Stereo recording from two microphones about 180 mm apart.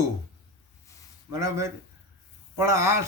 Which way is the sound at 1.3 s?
15° right (ahead or behind).